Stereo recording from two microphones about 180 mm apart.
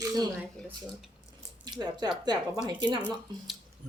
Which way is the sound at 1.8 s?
25° right (ahead or behind).